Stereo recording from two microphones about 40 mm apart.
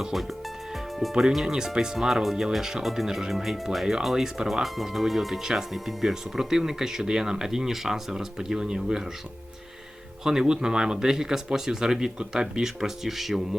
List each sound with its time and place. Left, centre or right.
1.5 s speech: centre
5.4 s speech: centre
10.2 s speech: centre